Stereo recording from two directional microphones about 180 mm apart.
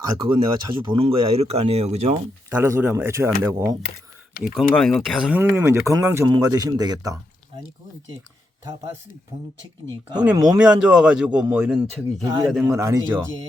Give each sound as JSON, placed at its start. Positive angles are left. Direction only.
{"t": 0.2, "sound": "speech", "side_deg": -30}
{"t": 2.5, "sound": "speech", "side_deg": -10}
{"t": 4.7, "sound": "a man's voice", "side_deg": 5}
{"t": 9.9, "sound": "speech", "side_deg": -20}
{"t": 10.6, "sound": "a man's voice", "side_deg": -5}
{"t": 12.2, "sound": "speech", "side_deg": -15}